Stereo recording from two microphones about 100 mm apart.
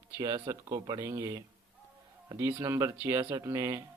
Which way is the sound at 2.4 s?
30° right (ahead or behind).